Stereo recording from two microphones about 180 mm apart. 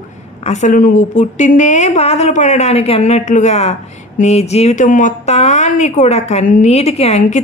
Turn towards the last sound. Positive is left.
turn(degrees=40)  # may be behind; listen again after turning